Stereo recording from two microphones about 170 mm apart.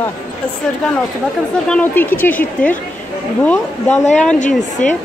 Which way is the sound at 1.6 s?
10° left (ahead or behind).